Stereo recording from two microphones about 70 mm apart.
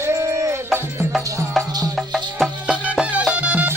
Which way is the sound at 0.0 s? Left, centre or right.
Right.